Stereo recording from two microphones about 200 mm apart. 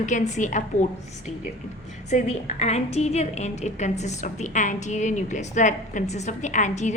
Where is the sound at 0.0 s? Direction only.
40° left (ahead or behind).